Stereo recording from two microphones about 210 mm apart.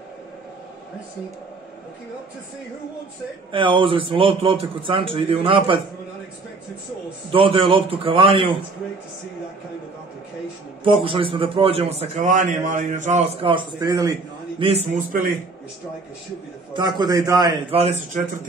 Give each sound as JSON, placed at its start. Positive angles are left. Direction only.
{"t": 3.5, "sound": "a man's voice", "side_deg": -25}
{"t": 7.2, "sound": "a man's voice", "side_deg": -25}
{"t": 10.8, "sound": "a man's voice", "side_deg": -25}
{"t": 14.6, "sound": "a man's voice", "side_deg": -30}
{"t": 16.7, "sound": "a man's voice", "side_deg": -20}